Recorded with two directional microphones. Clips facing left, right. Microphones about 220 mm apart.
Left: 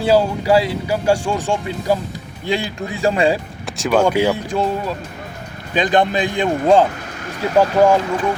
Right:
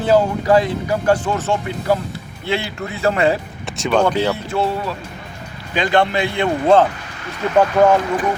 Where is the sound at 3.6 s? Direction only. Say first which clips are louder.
Left 1 dB; 5° left (ahead or behind).